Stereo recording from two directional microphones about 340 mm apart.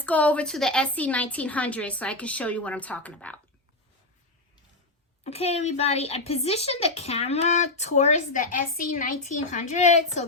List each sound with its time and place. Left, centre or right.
0.0 s a woman's voice: centre
5.2 s speech: centre